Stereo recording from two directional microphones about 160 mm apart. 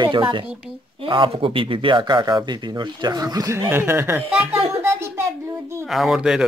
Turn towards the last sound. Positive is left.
turn(degrees=-5)  # may be behind; listen again after turning